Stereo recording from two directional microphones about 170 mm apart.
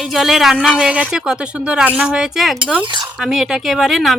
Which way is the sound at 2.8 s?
25° right (ahead or behind).